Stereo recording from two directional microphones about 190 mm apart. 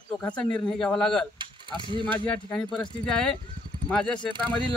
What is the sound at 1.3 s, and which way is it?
Mechanisms, 25° right (ahead or behind).